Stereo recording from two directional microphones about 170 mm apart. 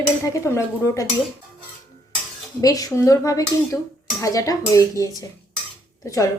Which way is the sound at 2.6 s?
20° left (ahead or behind).